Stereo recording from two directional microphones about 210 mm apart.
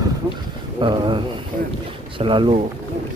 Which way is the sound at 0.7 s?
20° right (ahead or behind).